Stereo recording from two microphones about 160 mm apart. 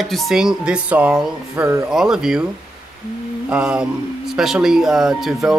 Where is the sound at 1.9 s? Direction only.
5° right (ahead or behind).